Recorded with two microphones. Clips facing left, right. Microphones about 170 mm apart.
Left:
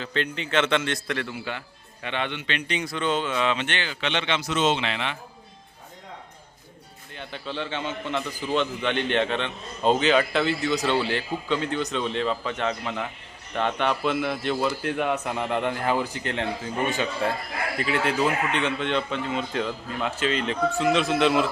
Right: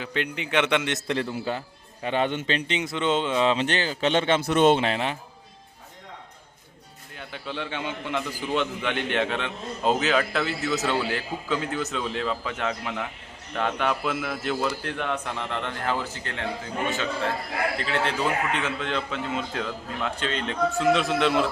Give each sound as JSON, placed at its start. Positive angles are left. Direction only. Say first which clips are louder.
{"t": 0.0, "sound": "a man's voice", "louder": "left 1 dB", "side_deg": -15}
{"t": 1.0, "sound": "speech", "louder": "right 3 dB", "side_deg": -30}
{"t": 2.6, "sound": "speech", "louder": "right 1 dB", "side_deg": -20}
{"t": 7.2, "sound": "a man's voice", "louder": "left 1 dB", "side_deg": -5}
{"t": 17.7, "sound": "a man's voice", "louder": "left 7 dB", "side_deg": 10}